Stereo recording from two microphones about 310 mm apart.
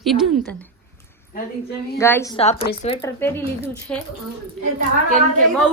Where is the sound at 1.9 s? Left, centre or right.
Centre.